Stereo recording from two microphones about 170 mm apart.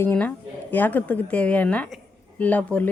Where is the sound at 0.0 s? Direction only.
10° left (ahead or behind).